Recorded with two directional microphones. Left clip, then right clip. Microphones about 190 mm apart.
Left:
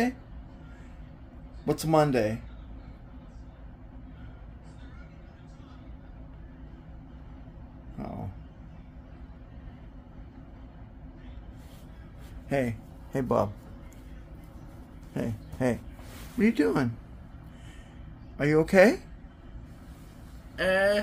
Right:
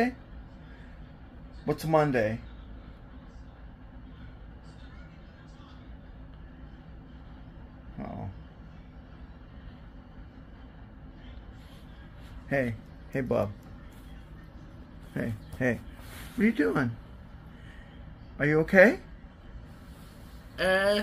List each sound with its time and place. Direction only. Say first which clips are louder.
1.7 s speech: left 1 dB; 20° left (ahead or behind)
12.4 s a man's voice: even; 15° left (ahead or behind)
15.1 s speech: left 1 dB; 10° left (ahead or behind)
18.4 s speech: even; 15° left (ahead or behind)
20.5 s speech: left 1 dB; 10° left (ahead or behind)